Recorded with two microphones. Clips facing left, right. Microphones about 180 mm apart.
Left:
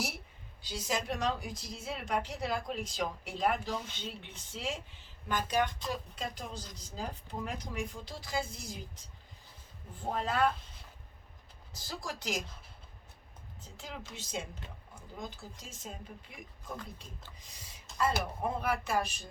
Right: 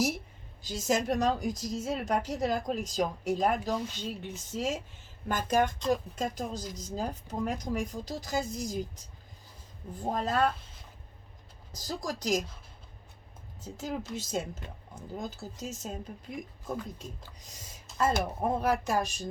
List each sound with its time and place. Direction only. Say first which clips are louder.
0.6 s a woman's voice: right 6 dB; 45° right (ahead or behind)
9.9 s speech: right 4 dB; 40° right (ahead or behind)
11.7 s speech: right 6 dB; 40° right (ahead or behind)
13.7 s speech: right 10 dB; 40° right (ahead or behind)
17.9 s speech: right 4 dB; 45° right (ahead or behind)